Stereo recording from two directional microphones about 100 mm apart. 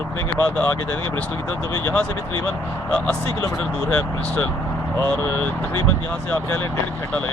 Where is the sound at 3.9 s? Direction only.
15° left (ahead or behind).